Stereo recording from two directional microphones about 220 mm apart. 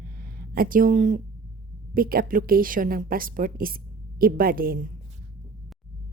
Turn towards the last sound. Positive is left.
turn(degrees=-40)  # may be behind; listen again after turning